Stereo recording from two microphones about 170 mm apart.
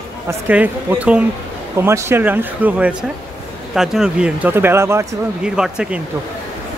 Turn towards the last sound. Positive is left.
turn(degrees=-5)  # may be behind; listen again after turning